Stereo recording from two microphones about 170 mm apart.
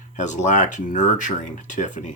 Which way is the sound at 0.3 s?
45° left (ahead or behind).